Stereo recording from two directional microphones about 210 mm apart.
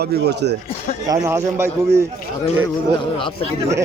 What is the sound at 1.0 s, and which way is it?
Speech, 15° right (ahead or behind).